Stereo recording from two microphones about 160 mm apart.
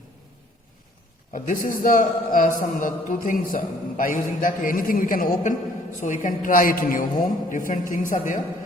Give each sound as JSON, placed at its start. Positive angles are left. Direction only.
{"t": 1.3, "sound": "a man's voice", "side_deg": 55}